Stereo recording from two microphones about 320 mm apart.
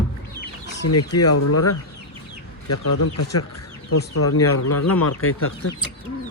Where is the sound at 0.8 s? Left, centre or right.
Left.